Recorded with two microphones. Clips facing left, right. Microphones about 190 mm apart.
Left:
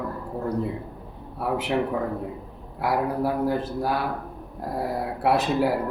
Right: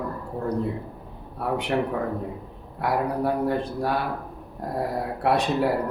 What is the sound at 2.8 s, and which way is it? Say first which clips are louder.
Speech: even; centre (ahead or behind).